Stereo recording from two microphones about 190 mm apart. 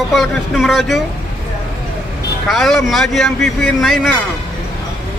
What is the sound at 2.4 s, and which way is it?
Speech, centre (ahead or behind).